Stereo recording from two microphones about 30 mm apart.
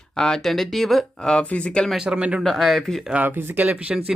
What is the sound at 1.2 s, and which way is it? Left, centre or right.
Speech, left.